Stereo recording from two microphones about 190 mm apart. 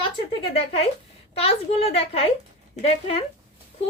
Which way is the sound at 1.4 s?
30° left (ahead or behind).